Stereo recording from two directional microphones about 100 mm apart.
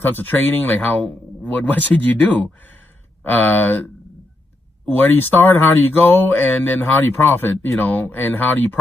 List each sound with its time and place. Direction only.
0.0 s speech: 20° left (ahead or behind)
5.0 s speech: 20° left (ahead or behind)